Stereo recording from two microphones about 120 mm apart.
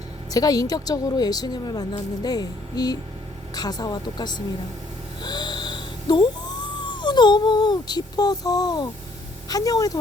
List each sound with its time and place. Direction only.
0.3 s speech: 30° left (ahead or behind)